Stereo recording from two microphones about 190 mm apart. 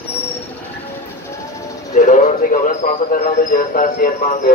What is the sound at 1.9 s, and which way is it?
Speech, 40° left (ahead or behind).